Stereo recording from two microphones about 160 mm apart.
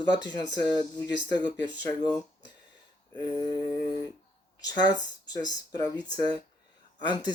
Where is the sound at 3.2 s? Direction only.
25° left (ahead or behind).